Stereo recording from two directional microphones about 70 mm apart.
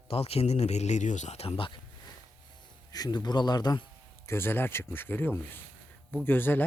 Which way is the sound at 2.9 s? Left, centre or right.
Left.